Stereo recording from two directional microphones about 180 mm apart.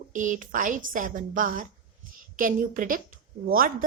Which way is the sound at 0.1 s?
45° right (ahead or behind).